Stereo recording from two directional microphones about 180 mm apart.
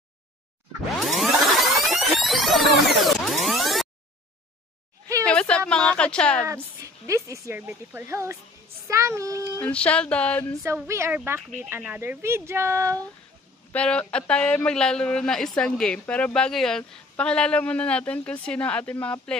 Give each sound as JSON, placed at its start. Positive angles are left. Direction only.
{"t": 0.9, "sound": "music", "side_deg": 0}
{"t": 5.2, "sound": "a sound", "side_deg": 5}
{"t": 5.7, "sound": "a woman's voice", "side_deg": 5}
{"t": 6.4, "sound": "speech", "side_deg": -15}
{"t": 9.6, "sound": "a sound", "side_deg": 5}
{"t": 10.6, "sound": "speech", "side_deg": -15}
{"t": 13.7, "sound": "a man's voice", "side_deg": 5}